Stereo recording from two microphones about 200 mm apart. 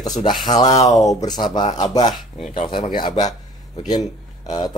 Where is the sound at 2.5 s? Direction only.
25° left (ahead or behind).